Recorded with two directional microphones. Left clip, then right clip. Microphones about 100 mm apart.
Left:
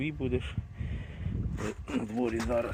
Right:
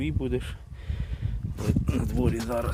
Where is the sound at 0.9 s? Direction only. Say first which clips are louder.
Even; 40° right (ahead or behind).